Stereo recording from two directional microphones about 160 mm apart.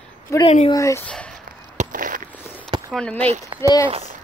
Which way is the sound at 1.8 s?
55° right (ahead or behind).